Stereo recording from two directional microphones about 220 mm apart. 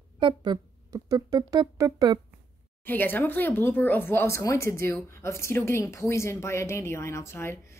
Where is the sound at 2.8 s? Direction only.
10° left (ahead or behind).